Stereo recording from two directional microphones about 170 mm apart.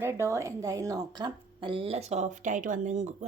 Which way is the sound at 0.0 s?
15° right (ahead or behind).